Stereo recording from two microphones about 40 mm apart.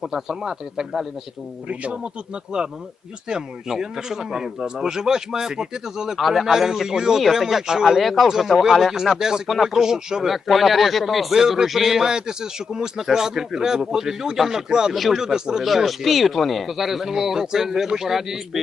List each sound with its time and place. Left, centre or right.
0.0 s speech: centre
1.6 s speech: right
3.7 s speech: centre
6.1 s speech: centre
6.5 s speech: centre
10.3 s speech: centre
14.9 s speech: centre
15.2 s speech: centre
15.6 s speech: centre